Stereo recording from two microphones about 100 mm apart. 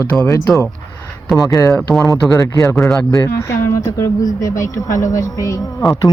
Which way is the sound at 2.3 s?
30° left (ahead or behind).